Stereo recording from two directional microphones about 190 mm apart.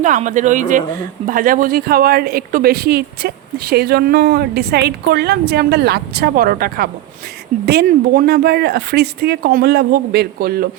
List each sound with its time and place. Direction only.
0.0 s speech: 40° right (ahead or behind)